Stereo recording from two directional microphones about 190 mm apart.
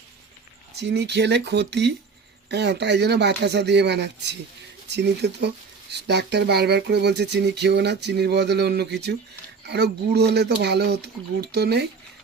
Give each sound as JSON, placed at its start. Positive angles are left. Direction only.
{"t": 0.8, "sound": "speech", "side_deg": -65}